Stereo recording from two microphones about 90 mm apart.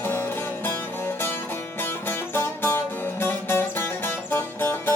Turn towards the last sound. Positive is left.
turn(degrees=20)  # may be behind; listen again after turning